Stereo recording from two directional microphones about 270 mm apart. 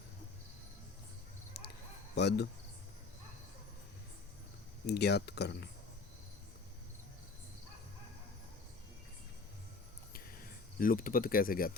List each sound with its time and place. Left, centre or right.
2.1 s speech: left
4.9 s speech: left
10.1 s a sound: left